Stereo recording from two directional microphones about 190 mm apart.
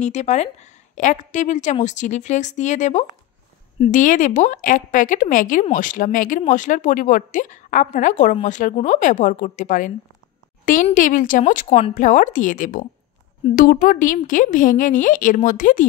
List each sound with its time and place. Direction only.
0.0 s a woman's voice: 35° left (ahead or behind)
10.6 s a sound: 45° left (ahead or behind)
11.0 s speech: 45° left (ahead or behind)